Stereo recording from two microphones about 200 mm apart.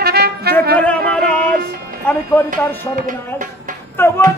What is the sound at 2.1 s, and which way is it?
Speech, 10° left (ahead or behind).